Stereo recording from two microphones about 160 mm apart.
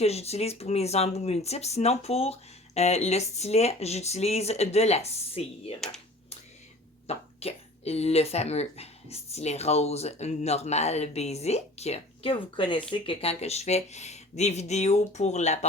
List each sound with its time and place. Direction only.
0.0 s speech: 40° left (ahead or behind)
7.1 s speech: 40° left (ahead or behind)